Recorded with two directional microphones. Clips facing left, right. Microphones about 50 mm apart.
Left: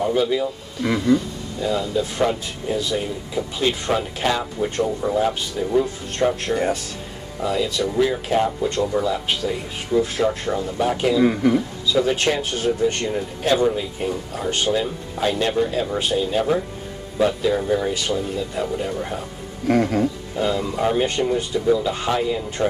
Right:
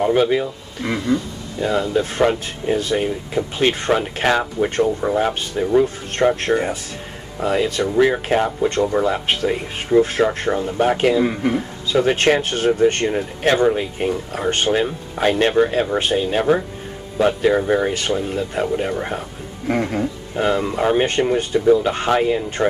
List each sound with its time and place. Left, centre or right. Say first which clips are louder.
0.1 s speech: right 4 dB; right
1.6 s speech: right 3 dB; right
20.4 s speech: right 3 dB; right